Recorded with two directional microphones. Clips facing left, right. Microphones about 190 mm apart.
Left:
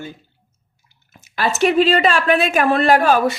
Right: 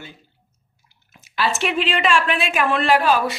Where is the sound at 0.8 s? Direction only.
45° left (ahead or behind).